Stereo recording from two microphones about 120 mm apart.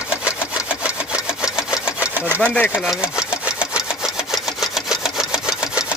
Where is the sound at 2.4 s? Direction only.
10° left (ahead or behind).